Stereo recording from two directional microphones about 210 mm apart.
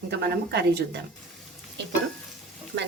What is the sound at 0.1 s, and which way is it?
Speech, 50° right (ahead or behind).